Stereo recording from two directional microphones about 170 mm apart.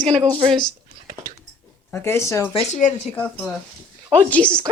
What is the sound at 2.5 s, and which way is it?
Speech, 45° left (ahead or behind).